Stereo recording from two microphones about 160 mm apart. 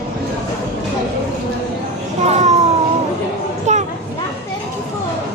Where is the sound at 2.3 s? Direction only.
45° right (ahead or behind).